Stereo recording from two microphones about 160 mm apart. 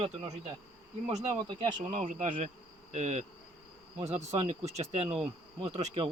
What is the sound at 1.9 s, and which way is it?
Speech, 55° right (ahead or behind).